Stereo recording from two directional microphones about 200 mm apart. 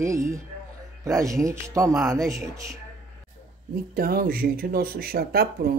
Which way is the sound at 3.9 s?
50° right (ahead or behind).